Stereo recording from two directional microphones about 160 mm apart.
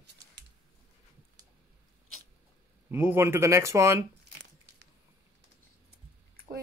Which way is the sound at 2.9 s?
15° right (ahead or behind).